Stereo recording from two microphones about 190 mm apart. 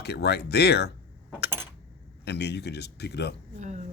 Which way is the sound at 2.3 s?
60° left (ahead or behind).